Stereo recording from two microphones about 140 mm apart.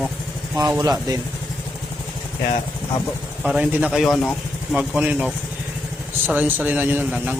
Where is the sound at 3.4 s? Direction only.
10° right (ahead or behind).